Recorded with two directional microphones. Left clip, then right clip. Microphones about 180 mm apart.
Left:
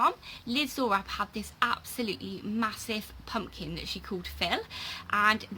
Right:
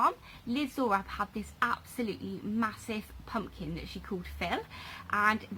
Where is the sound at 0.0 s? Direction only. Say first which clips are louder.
Left 2 dB; 25° left (ahead or behind).